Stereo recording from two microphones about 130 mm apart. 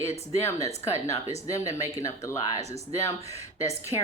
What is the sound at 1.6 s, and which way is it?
A woman's voice, 25° left (ahead or behind).